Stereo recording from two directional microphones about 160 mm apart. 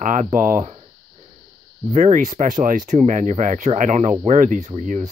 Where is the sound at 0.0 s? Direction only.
50° right (ahead or behind).